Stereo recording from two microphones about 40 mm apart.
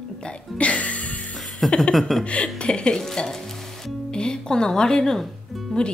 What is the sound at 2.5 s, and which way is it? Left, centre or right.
Speech, left.